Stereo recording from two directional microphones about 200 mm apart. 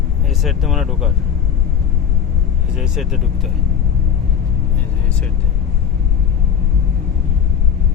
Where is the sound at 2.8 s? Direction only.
Centre (ahead or behind).